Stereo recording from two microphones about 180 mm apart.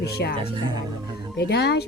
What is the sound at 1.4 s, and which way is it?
Speech, 65° left (ahead or behind).